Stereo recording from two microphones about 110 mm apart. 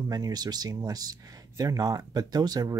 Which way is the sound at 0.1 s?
40° right (ahead or behind).